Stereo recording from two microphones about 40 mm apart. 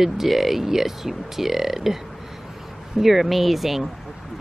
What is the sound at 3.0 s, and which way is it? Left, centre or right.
Speech, centre.